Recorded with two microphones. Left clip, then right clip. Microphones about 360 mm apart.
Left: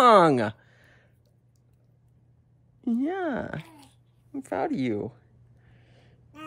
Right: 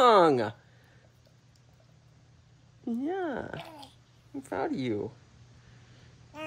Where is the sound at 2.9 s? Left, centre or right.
Left.